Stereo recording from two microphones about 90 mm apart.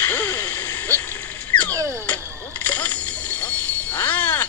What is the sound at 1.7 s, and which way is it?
Music, 35° right (ahead or behind).